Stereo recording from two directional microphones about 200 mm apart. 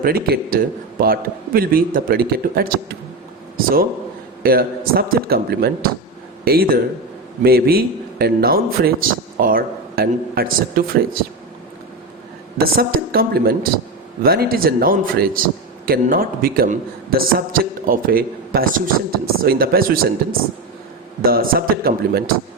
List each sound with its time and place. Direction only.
0.0 s a man's voice: 45° right (ahead or behind)
4.4 s a man's voice: 50° right (ahead or behind)
12.6 s a man's voice: 50° right (ahead or behind)
21.2 s a man's voice: 50° right (ahead or behind)